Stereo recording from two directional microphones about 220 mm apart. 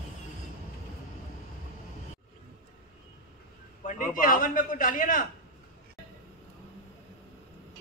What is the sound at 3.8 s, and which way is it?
A man's voice, 35° left (ahead or behind).